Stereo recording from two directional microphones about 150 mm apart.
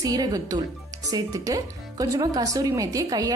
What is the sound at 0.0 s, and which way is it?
Speech, 25° right (ahead or behind).